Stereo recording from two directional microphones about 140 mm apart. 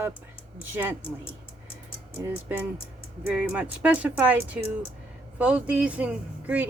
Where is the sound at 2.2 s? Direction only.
15° right (ahead or behind).